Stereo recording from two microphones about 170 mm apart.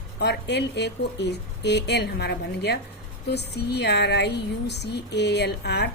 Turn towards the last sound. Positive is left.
turn(degrees=75)  # may be behind; listen again after turning